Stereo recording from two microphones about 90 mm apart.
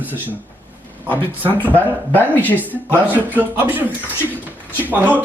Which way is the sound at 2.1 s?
20° left (ahead or behind).